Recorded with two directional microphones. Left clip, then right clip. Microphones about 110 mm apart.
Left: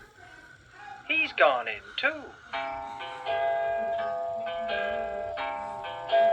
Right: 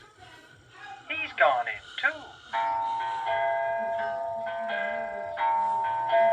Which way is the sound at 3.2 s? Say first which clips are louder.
Left 2 dB; 45° left (ahead or behind).